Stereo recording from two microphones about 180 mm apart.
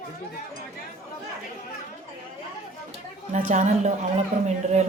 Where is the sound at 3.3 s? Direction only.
45° right (ahead or behind).